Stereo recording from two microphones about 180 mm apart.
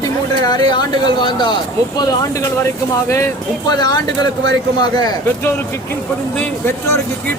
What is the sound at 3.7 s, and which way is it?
Speech, 25° left (ahead or behind).